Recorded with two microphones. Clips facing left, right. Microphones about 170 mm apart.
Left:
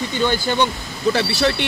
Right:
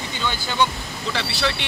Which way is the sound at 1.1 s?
50° left (ahead or behind).